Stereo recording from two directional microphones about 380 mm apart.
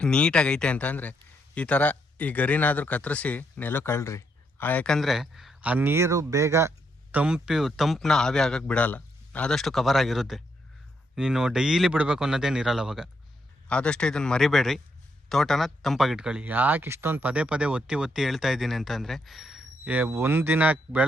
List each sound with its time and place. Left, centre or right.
0.0 s speech: centre